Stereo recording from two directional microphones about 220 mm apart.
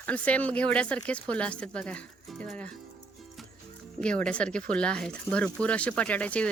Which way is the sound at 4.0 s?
5° left (ahead or behind).